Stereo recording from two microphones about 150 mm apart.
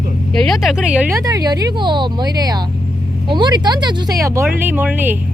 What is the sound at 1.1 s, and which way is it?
Speech, 25° right (ahead or behind).